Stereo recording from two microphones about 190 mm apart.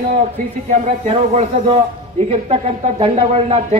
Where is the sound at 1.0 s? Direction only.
35° right (ahead or behind).